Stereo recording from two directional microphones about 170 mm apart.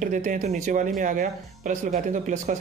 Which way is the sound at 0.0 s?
50° right (ahead or behind).